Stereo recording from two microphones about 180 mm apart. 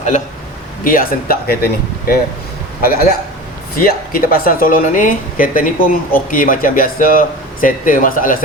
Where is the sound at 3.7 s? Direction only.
55° left (ahead or behind).